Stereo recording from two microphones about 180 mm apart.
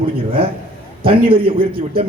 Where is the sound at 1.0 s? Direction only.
30° right (ahead or behind).